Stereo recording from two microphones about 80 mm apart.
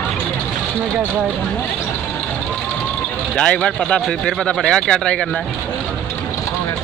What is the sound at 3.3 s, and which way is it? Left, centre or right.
A man's voice, centre.